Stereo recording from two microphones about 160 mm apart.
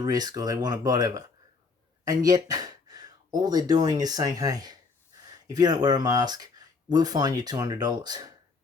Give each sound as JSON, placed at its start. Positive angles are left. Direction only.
{"t": 0.0, "sound": "speech", "side_deg": -25}